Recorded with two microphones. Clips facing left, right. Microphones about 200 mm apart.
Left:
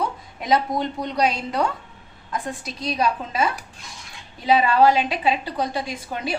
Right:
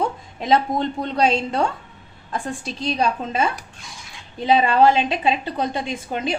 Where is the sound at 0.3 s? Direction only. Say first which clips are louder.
Right 2 dB; 25° right (ahead or behind).